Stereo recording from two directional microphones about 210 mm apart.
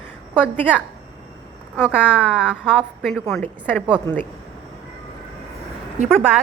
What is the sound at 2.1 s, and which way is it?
A woman's voice, 5° right (ahead or behind).